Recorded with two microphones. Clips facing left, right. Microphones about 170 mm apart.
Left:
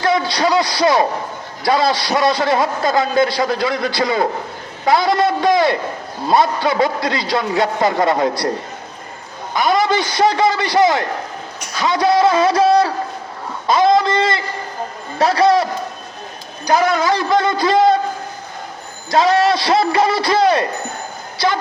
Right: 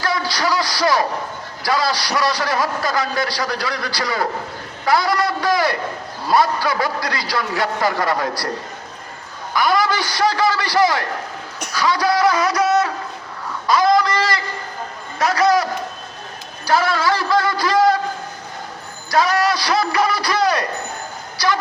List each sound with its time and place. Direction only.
0.0 s a sound: 25° left (ahead or behind)
1.6 s a man's voice: 25° left (ahead or behind)
9.5 s a man's voice: 25° left (ahead or behind)
19.1 s a man's voice: 25° left (ahead or behind)